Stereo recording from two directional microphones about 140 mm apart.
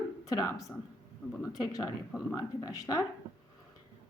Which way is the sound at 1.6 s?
25° left (ahead or behind).